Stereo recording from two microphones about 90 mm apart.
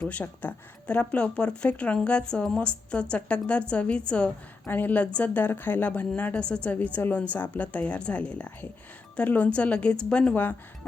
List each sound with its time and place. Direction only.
0.0 s a woman's voice: 15° left (ahead or behind)